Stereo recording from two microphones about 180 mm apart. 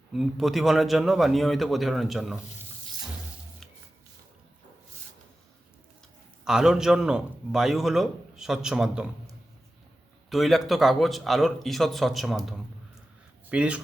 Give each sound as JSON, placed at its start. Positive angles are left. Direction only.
{"t": 0.1, "sound": "a man's voice", "side_deg": 0}
{"t": 6.4, "sound": "a man's voice", "side_deg": -5}
{"t": 10.2, "sound": "a man's voice", "side_deg": 0}
{"t": 13.5, "sound": "speech", "side_deg": -5}